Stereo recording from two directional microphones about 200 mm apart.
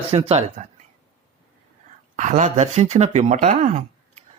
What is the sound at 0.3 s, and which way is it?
Speech, 35° right (ahead or behind).